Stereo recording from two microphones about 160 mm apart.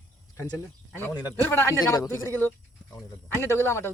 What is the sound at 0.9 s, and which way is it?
Speech, 10° left (ahead or behind).